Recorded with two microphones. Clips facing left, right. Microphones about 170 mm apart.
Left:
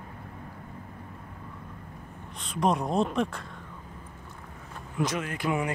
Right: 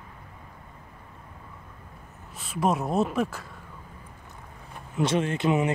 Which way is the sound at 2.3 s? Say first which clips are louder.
Right 1 dB; 5° right (ahead or behind).